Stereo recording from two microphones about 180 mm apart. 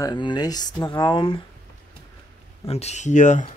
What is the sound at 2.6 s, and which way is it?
Speech, 35° left (ahead or behind).